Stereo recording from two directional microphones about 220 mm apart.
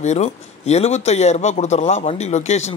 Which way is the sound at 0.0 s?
30° left (ahead or behind).